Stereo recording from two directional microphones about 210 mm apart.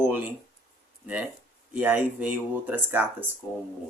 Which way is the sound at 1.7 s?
5° right (ahead or behind).